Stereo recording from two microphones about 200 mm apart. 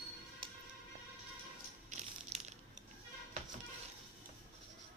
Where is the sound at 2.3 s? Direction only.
35° right (ahead or behind).